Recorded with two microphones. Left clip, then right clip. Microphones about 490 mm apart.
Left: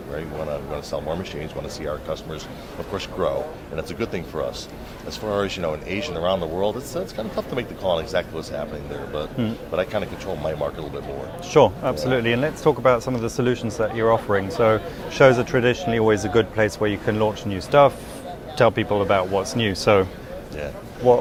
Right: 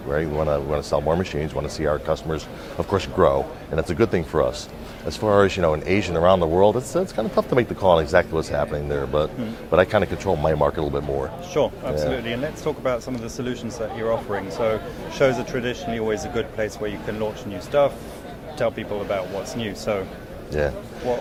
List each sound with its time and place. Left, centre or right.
0.7 s speech: right
9.7 s speech: right
11.5 s speech: left
20.6 s speech: right